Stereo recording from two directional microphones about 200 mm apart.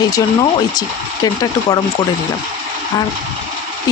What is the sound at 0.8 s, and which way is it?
Speech, 20° left (ahead or behind).